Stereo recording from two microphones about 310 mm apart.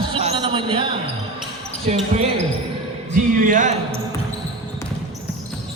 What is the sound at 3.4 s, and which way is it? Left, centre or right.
Speech, right.